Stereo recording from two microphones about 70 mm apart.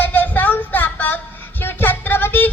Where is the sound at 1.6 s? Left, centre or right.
Left.